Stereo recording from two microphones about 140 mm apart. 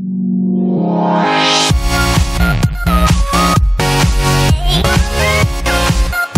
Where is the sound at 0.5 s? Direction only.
Centre (ahead or behind).